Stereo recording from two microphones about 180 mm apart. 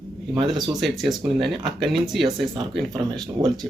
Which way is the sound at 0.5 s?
25° right (ahead or behind).